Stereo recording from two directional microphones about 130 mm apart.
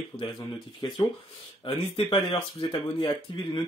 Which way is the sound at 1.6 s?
40° left (ahead or behind).